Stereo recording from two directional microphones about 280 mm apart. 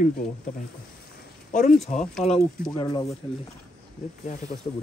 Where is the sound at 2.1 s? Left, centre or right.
Centre.